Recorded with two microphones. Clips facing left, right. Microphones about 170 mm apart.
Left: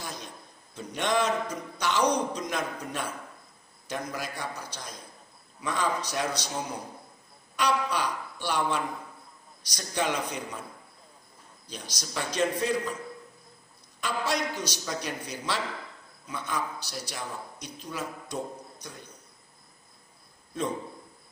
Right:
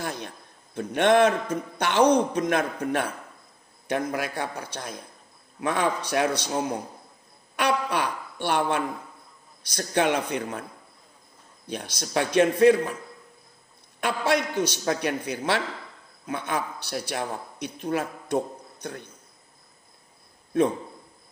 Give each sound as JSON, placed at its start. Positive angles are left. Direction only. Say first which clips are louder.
{"t": 0.0, "sound": "a sound", "louder": "right 7 dB", "side_deg": -60}
{"t": 0.7, "sound": "a man's voice", "louder": "right 8 dB", "side_deg": -60}
{"t": 11.6, "sound": "a man's voice", "louder": "right 8 dB", "side_deg": -60}
{"t": 14.0, "sound": "a man's voice", "louder": "right 5 dB", "side_deg": -60}